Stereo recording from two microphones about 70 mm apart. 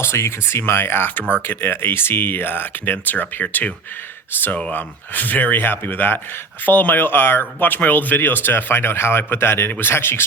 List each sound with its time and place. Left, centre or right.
0.0 s speech: left
4.7 s speech: left